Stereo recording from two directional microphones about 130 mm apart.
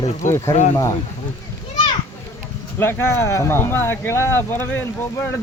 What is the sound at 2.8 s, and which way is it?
A man's voice, 20° left (ahead or behind).